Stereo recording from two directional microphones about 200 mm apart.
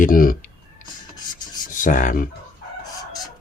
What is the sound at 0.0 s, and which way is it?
Clicking, 45° left (ahead or behind).